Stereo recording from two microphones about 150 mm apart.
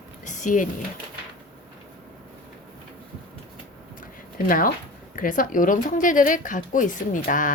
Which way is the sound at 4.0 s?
65° left (ahead or behind).